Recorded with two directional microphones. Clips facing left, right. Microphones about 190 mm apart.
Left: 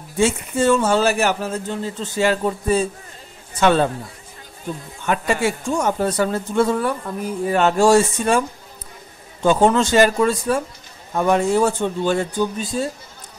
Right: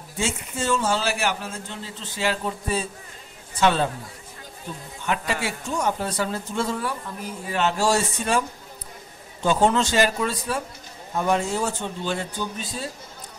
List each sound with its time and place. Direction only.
0.2 s a man's voice: 55° left (ahead or behind)
5.0 s a man's voice: 50° left (ahead or behind)
11.1 s a man's voice: 60° left (ahead or behind)